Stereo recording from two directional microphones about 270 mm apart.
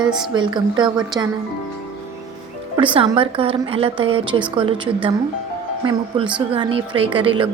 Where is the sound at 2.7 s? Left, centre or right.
Centre.